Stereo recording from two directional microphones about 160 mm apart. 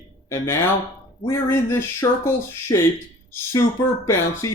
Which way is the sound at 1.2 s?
15° left (ahead or behind).